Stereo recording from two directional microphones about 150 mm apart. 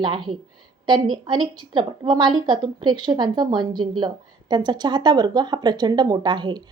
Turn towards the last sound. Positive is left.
turn(degrees=-30)  # may be behind; listen again after turning